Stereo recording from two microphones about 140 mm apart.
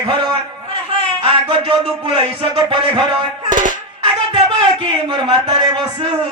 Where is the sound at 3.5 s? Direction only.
65° right (ahead or behind).